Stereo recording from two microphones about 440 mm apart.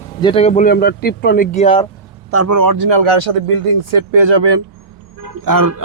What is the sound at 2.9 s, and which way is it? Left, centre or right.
Speech, right.